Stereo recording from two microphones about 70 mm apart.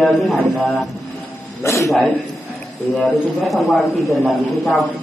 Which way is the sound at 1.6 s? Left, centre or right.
Left.